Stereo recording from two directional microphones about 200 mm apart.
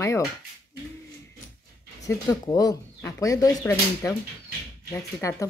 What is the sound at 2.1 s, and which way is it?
Speech, 15° left (ahead or behind).